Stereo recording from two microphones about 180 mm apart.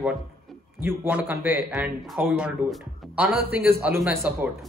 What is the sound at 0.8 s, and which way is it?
A man's voice, 10° right (ahead or behind).